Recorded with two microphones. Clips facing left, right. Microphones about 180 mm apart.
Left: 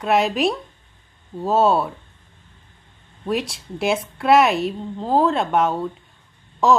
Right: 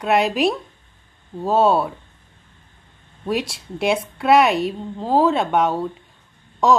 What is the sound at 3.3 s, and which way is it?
A woman's voice, centre (ahead or behind).